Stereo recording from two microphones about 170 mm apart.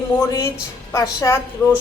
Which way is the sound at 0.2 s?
20° left (ahead or behind).